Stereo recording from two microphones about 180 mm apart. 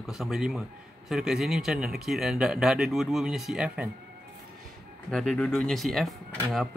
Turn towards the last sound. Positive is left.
turn(degrees=0)  # may be behind; listen again after turning